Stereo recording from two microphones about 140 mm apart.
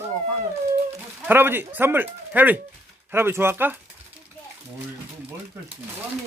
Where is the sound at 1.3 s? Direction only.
15° right (ahead or behind).